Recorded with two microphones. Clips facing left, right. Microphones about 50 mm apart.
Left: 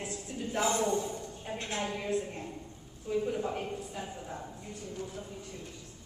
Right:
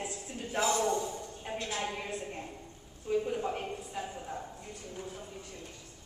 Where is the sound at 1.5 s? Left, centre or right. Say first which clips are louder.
Right 1 dB; right.